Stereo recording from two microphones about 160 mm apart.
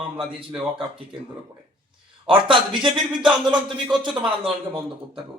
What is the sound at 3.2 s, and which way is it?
Speech, 5° right (ahead or behind).